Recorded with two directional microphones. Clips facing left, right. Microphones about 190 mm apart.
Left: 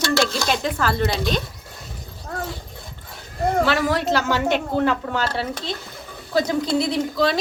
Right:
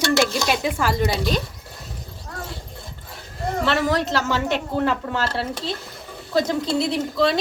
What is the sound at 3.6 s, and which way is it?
A woman's voice, centre (ahead or behind).